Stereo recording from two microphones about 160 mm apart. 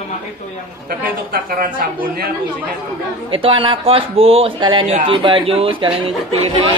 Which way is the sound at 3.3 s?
35° right (ahead or behind).